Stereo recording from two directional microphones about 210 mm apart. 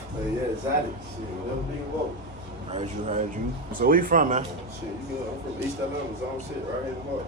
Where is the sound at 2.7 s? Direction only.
35° right (ahead or behind).